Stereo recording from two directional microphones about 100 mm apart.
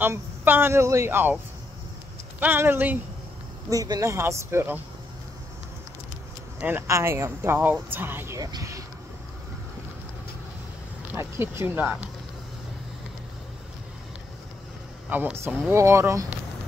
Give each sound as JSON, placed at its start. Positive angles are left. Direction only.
{"t": 0.0, "sound": "speech", "side_deg": -20}
{"t": 2.4, "sound": "speech", "side_deg": -20}
{"t": 3.7, "sound": "speech", "side_deg": -35}
{"t": 6.9, "sound": "speech", "side_deg": -25}
{"t": 8.4, "sound": "speech", "side_deg": -40}
{"t": 11.1, "sound": "speech", "side_deg": -25}
{"t": 15.0, "sound": "speech", "side_deg": -15}